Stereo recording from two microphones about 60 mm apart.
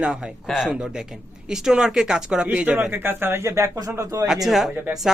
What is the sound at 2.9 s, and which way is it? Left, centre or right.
A man's voice, right.